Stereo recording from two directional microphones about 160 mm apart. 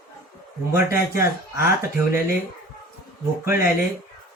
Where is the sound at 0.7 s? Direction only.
15° right (ahead or behind).